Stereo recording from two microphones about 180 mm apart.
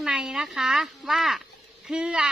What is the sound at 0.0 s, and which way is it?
A woman's voice, 5° right (ahead or behind).